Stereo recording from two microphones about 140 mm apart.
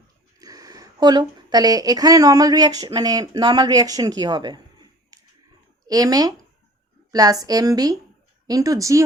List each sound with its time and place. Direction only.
0.3 s speech: 25° right (ahead or behind)
5.1 s finger snapping: 25° right (ahead or behind)
5.9 s a woman's voice: 25° right (ahead or behind)